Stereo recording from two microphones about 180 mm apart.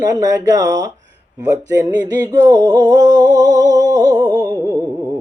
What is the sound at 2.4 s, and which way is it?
Mantra, 20° right (ahead or behind).